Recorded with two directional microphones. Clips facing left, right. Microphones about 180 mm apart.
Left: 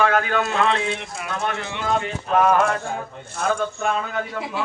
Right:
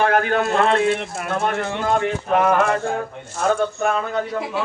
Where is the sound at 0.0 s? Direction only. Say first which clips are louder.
Right 2 dB; 45° right (ahead or behind).